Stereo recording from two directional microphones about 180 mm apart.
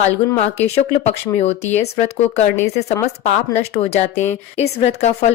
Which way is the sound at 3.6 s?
35° left (ahead or behind).